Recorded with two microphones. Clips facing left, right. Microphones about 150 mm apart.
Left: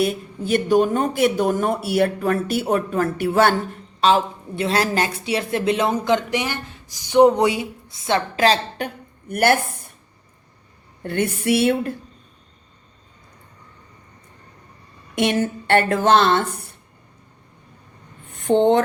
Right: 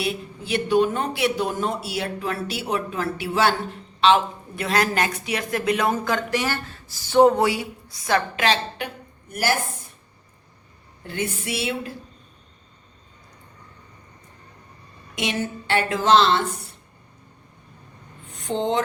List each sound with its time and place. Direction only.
0.0 s speech: 45° left (ahead or behind)
4.5 s speech: 30° left (ahead or behind)
9.3 s a woman's voice: 60° left (ahead or behind)
11.0 s a woman's voice: 60° left (ahead or behind)
15.1 s speech: 55° left (ahead or behind)
18.3 s a sound: 55° left (ahead or behind)